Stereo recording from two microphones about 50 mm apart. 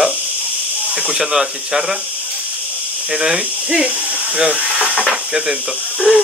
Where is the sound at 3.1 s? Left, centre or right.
Centre.